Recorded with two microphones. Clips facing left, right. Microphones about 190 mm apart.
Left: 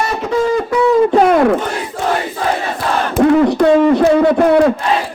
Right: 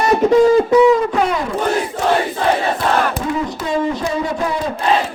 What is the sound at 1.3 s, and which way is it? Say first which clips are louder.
Speech: left 10 dB; 65° left (ahead or behind).